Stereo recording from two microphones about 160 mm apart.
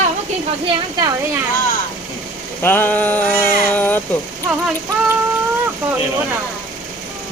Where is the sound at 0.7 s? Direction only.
25° right (ahead or behind).